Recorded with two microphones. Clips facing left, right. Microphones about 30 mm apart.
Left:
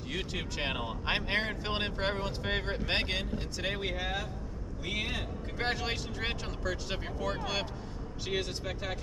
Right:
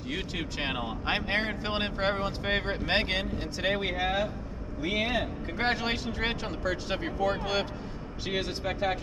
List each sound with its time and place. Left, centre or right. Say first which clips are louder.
0.1 s speech: right 2 dB; centre